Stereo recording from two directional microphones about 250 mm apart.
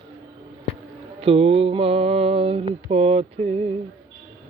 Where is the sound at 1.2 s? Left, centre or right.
Right.